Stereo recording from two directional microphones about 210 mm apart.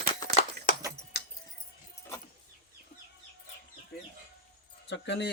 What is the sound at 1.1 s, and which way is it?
Music, 50° left (ahead or behind).